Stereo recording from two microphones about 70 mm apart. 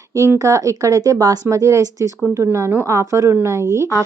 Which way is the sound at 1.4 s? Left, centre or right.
Right.